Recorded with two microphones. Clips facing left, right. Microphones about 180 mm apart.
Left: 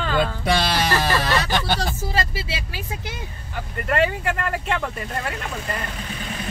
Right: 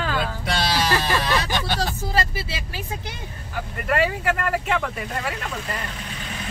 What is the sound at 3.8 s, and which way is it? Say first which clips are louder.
Speech: left 1 dB; 5° right (ahead or behind).